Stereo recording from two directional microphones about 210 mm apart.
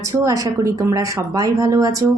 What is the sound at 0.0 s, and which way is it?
A woman's voice, 15° right (ahead or behind).